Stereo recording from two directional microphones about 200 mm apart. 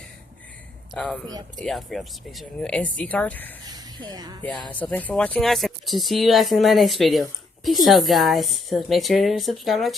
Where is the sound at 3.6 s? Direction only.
20° right (ahead or behind).